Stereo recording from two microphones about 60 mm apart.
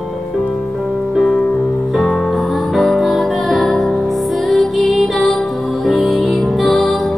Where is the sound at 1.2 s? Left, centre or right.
Centre.